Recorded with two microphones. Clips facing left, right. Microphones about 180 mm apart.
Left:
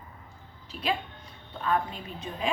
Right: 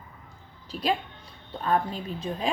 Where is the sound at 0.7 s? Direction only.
35° right (ahead or behind).